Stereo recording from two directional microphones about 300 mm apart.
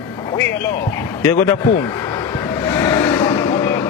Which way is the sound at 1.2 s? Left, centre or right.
Centre.